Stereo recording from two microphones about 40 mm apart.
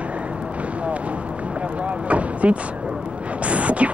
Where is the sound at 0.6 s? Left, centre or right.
Right.